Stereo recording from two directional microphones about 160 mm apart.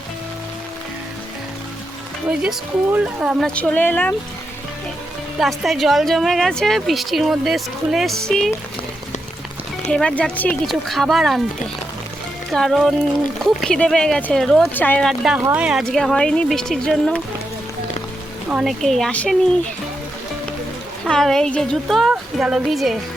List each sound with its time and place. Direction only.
2.4 s a woman's voice: 5° right (ahead or behind)
3.5 s speech: 10° left (ahead or behind)
5.4 s a woman's voice: centre (ahead or behind)
9.9 s a woman's voice: 5° left (ahead or behind)
12.5 s a woman's voice: centre (ahead or behind)
15.9 s a woman's voice: 5° left (ahead or behind)
18.5 s a woman's voice: centre (ahead or behind)
21.0 s a woman's voice: 5° left (ahead or behind)